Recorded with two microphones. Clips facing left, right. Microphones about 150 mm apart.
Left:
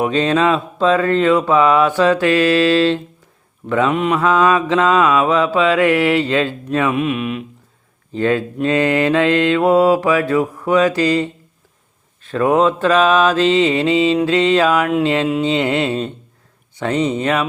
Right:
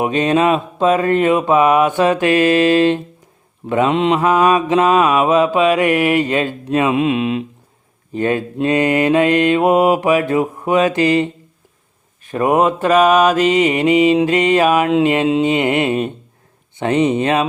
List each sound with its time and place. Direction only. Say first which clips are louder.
0.0 s mantra: right 1 dB; 20° right (ahead or behind)
4.2 s mantra: right 1 dB; 15° right (ahead or behind)
8.1 s mantra: left 1 dB; 15° right (ahead or behind)